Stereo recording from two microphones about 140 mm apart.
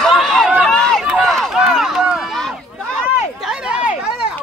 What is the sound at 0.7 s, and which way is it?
Run, 5° left (ahead or behind).